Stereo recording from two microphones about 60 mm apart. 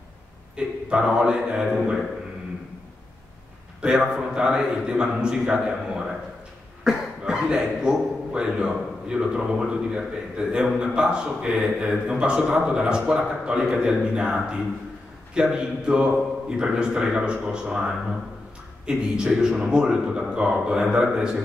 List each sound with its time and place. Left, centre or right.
0.6 s a man's voice: centre
1.7 s a man's voice: centre
4.0 s a man's voice: centre